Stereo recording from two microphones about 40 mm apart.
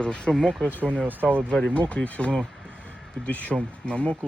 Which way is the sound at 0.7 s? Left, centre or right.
Right.